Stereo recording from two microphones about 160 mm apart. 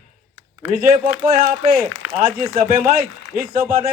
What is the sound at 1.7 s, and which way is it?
A man's voice, 60° right (ahead or behind).